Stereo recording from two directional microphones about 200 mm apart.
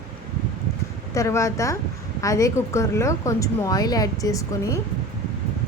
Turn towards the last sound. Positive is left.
turn(degrees=15)  # may be behind; listen again after turning